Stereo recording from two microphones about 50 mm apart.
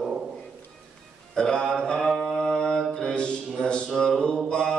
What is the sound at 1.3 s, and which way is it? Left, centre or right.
Speech, centre.